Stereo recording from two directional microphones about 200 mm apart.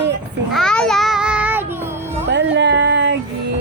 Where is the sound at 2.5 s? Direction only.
65° right (ahead or behind).